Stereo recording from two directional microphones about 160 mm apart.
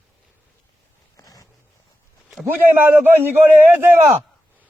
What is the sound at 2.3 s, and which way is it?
A man's voice, 5° right (ahead or behind).